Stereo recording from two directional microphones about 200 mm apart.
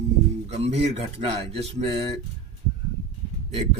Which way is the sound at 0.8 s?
30° right (ahead or behind).